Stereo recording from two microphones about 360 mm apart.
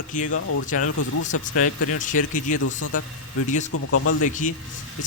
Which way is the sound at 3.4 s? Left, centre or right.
Centre.